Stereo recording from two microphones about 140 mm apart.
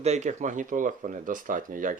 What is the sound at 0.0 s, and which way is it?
Speech, 55° right (ahead or behind).